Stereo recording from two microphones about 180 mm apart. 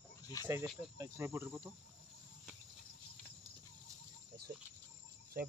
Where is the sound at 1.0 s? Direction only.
15° right (ahead or behind).